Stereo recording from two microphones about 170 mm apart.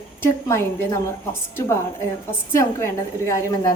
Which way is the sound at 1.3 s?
15° left (ahead or behind).